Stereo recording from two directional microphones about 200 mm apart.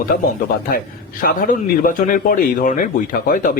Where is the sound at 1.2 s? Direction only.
45° left (ahead or behind).